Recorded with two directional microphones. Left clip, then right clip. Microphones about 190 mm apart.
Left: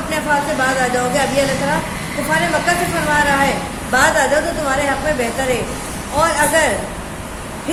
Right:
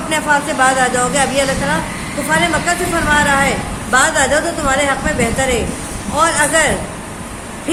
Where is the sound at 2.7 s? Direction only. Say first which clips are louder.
Left 1 dB; 30° right (ahead or behind).